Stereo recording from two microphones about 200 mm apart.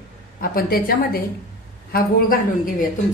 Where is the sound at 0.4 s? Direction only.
50° left (ahead or behind).